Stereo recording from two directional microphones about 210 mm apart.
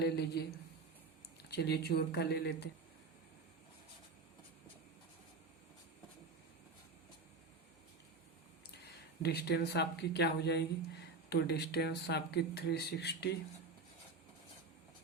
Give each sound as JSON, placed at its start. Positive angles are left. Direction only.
{"t": 0.0, "sound": "speech", "side_deg": 50}
{"t": 1.5, "sound": "speech", "side_deg": 50}
{"t": 9.2, "sound": "speech", "side_deg": 50}